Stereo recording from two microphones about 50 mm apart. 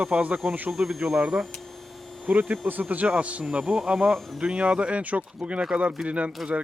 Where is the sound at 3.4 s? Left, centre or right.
Centre.